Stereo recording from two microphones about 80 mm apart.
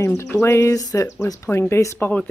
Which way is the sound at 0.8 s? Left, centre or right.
Left.